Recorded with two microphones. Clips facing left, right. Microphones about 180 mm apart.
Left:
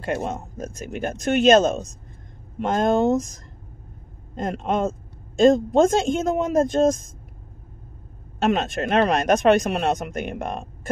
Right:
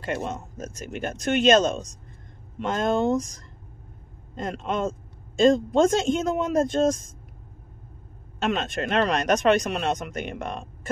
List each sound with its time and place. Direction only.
0.0 s speech: 45° left (ahead or behind)
8.4 s speech: 45° left (ahead or behind)